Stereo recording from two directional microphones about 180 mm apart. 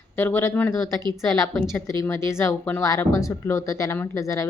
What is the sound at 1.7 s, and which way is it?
Speech, 15° left (ahead or behind).